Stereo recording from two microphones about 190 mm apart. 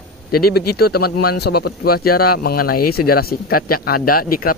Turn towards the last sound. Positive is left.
turn(degrees=50)  # may be behind; listen again after turning